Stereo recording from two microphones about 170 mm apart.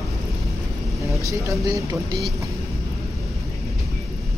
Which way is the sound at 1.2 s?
15° right (ahead or behind).